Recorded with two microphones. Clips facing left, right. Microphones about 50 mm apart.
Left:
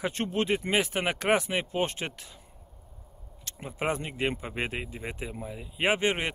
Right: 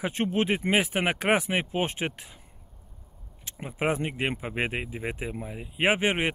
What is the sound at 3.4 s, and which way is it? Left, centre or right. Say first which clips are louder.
Speech: right 3 dB; centre.